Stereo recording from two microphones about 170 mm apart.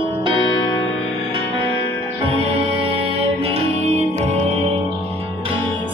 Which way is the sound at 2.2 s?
35° right (ahead or behind).